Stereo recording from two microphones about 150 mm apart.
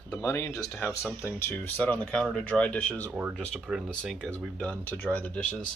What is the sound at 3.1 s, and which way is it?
Speech, 10° right (ahead or behind).